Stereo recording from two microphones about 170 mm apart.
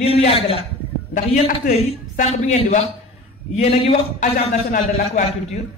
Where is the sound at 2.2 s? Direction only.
40° left (ahead or behind).